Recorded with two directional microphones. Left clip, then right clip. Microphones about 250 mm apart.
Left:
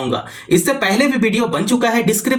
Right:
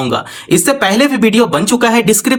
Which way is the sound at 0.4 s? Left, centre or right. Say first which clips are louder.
Right 4 dB; right.